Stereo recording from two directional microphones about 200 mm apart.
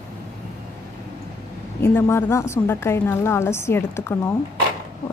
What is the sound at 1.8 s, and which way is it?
A woman's voice, 10° left (ahead or behind).